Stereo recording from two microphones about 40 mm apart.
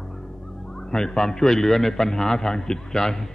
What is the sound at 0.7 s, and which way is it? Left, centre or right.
A man's voice, centre.